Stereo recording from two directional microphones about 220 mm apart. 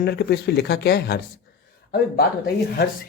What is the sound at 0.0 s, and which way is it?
Speech, 45° left (ahead or behind).